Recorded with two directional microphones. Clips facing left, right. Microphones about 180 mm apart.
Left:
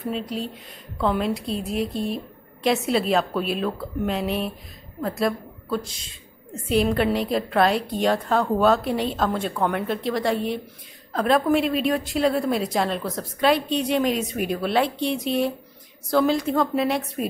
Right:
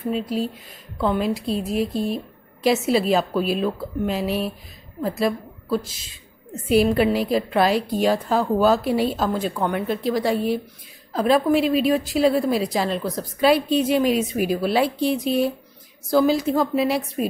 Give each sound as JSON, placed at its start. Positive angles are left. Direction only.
{"t": 0.1, "sound": "a woman's voice", "side_deg": -5}